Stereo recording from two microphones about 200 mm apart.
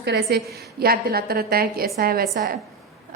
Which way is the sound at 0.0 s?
55° right (ahead or behind).